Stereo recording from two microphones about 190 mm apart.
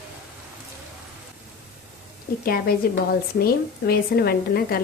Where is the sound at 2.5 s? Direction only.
50° left (ahead or behind).